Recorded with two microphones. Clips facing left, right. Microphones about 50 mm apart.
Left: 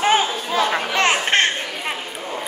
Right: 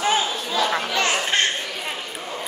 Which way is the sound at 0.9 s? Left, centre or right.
Left.